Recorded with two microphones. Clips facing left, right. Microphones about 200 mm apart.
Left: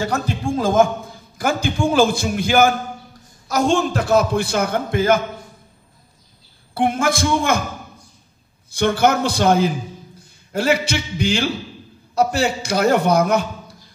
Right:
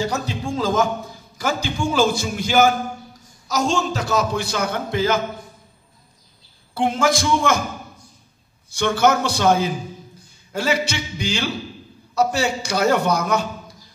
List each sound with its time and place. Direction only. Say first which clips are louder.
0.0 s a man's voice: left 2 dB; 55° left (ahead or behind)
6.7 s a man's voice: left 1 dB; 55° left (ahead or behind)
8.7 s a man's voice: left 1 dB; 55° left (ahead or behind)